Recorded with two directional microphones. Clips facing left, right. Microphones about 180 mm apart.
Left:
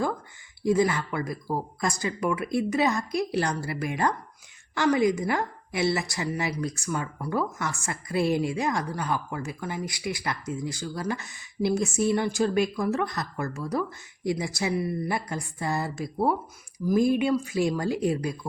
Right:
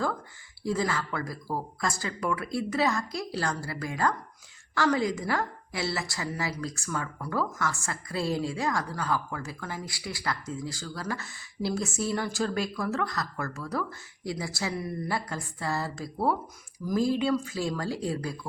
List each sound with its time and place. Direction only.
0.6 s a woman's voice: 15° left (ahead or behind)